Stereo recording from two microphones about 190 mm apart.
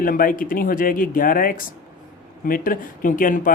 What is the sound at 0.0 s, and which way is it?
Speech, 45° left (ahead or behind).